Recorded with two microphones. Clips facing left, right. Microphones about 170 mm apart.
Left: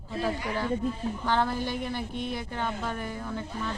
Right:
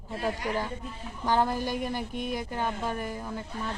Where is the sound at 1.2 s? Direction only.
15° right (ahead or behind).